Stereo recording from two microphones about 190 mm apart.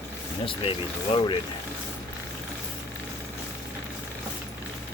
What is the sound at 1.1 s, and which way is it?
Speech, 30° left (ahead or behind).